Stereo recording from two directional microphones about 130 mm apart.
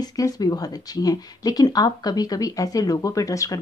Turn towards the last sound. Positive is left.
turn(degrees=25)  # may be behind; listen again after turning